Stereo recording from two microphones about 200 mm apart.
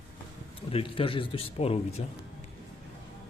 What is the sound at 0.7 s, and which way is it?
Speech, 25° left (ahead or behind).